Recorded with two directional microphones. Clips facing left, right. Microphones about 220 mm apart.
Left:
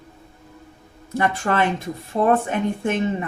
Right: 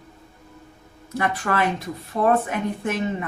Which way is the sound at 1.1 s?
30° left (ahead or behind).